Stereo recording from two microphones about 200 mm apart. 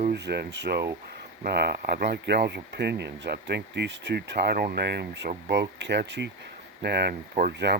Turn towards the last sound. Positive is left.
turn(degrees=-55)  # may be behind; listen again after turning